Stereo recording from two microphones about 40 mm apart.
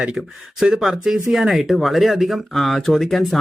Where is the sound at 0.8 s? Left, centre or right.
Centre.